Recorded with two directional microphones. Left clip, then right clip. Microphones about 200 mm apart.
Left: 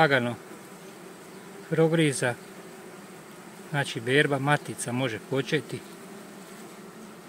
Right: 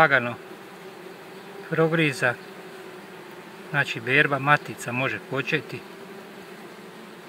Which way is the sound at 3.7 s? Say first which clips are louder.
Right 4 dB; 30° left (ahead or behind).